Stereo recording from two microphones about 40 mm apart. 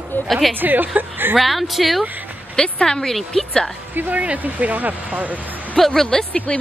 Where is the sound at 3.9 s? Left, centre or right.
Right.